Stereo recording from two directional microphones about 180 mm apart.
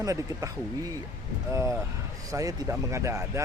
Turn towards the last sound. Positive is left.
turn(degrees=-15)  # may be behind; listen again after turning